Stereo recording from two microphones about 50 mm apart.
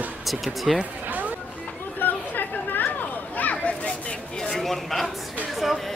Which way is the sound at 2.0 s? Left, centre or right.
Left.